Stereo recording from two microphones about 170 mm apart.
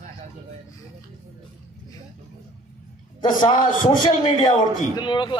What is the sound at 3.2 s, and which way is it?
Speech, 25° left (ahead or behind).